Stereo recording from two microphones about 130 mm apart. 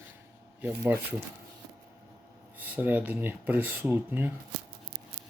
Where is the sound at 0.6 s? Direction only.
10° right (ahead or behind).